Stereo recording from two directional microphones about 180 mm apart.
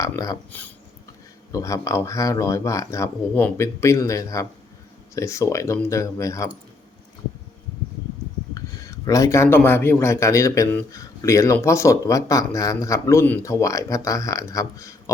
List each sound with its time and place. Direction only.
0.0 s speech: 20° left (ahead or behind)
1.5 s speech: 20° left (ahead or behind)
9.0 s speech: 20° left (ahead or behind)